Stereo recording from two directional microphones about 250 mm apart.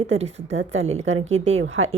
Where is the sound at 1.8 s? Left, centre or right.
Right.